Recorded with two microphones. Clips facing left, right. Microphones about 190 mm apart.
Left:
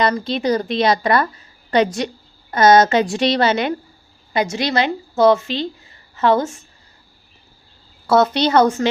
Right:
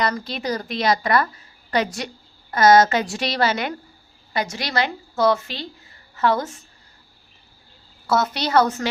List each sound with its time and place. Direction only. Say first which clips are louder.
0.0 s a woman's voice: left 6 dB; 25° left (ahead or behind)
8.3 s a woman's voice: left 4 dB; 25° left (ahead or behind)